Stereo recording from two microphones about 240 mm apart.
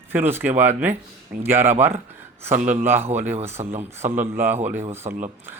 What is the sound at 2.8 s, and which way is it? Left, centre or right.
Speech, centre.